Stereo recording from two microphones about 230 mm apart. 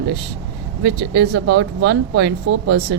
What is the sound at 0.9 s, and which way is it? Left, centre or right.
Speech, right.